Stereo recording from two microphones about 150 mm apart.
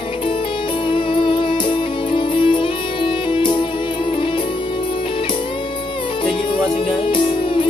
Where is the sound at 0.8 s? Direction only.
35° left (ahead or behind).